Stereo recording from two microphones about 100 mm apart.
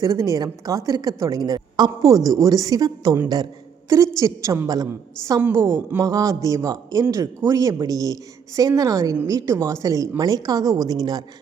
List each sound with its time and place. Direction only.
0.0 s a woman's voice: 35° right (ahead or behind)